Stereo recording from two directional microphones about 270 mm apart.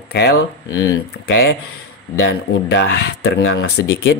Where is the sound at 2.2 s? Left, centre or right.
Left.